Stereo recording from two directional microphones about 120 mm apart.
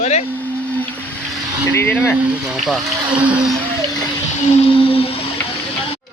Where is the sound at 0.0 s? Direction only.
65° left (ahead or behind).